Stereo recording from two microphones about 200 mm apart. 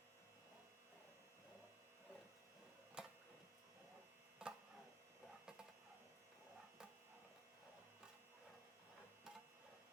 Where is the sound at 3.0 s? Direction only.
5° right (ahead or behind).